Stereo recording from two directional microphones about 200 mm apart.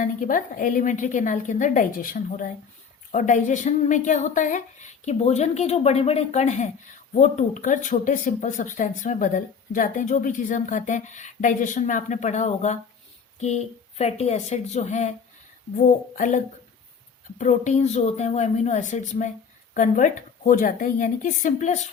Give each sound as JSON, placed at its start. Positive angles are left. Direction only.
{"t": 0.0, "sound": "speech", "side_deg": 40}